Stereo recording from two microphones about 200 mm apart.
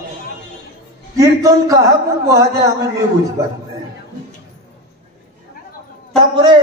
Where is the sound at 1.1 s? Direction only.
15° right (ahead or behind).